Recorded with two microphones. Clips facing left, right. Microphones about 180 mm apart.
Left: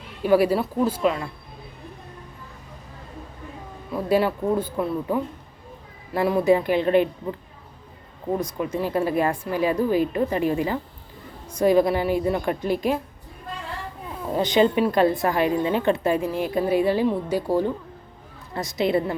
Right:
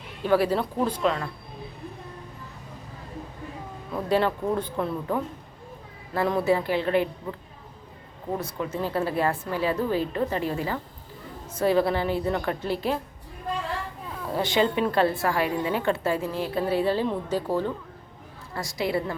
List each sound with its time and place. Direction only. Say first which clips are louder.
0.2 s a woman's voice: left 4 dB; 10° left (ahead or behind)
3.9 s a woman's voice: left 3 dB; 10° left (ahead or behind)
8.4 s a woman's voice: left 2 dB; 15° left (ahead or behind)
14.3 s a woman's voice: left 4 dB; 20° left (ahead or behind)